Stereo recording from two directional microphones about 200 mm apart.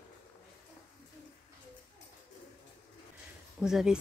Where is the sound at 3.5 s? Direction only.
5° right (ahead or behind).